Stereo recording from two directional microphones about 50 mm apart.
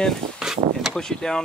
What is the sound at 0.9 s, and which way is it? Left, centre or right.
Speech, centre.